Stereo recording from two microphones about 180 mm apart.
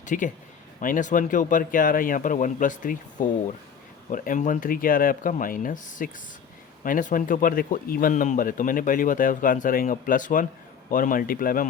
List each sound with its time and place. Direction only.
0.0 s speech: 45° left (ahead or behind)